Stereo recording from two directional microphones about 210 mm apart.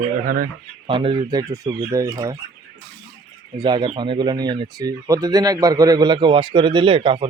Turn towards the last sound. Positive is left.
turn(degrees=-25)  # may be behind; listen again after turning